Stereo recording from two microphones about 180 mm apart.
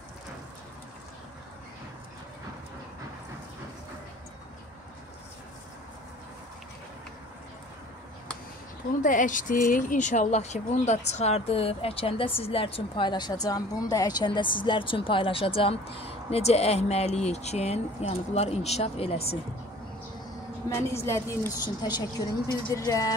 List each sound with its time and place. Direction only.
9.0 s a woman's voice: 45° left (ahead or behind)
20.7 s a woman's voice: 15° left (ahead or behind)